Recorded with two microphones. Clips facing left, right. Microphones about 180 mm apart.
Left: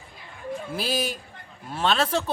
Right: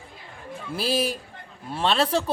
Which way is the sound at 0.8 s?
30° right (ahead or behind).